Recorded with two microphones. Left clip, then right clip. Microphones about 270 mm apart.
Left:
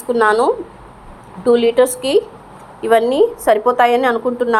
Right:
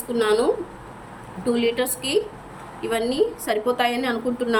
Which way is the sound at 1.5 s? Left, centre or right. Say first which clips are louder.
Left 10 dB; centre.